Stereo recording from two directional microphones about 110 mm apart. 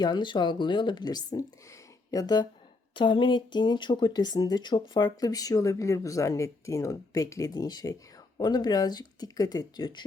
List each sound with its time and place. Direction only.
0.0 s speech: 40° left (ahead or behind)
2.9 s speech: 45° left (ahead or behind)